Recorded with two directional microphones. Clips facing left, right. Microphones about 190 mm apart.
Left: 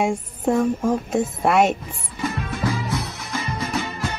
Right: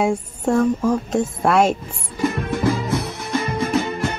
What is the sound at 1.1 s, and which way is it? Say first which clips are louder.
Speech: even; centre (ahead or behind).